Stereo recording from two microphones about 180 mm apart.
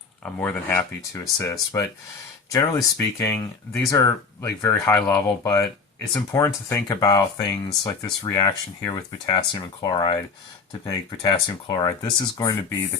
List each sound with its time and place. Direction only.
0.2 s speech: 10° left (ahead or behind)